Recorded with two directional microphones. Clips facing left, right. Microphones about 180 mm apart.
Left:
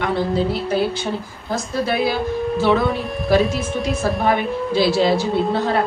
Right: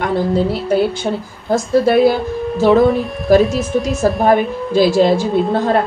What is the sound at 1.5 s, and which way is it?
A woman's voice, 45° right (ahead or behind).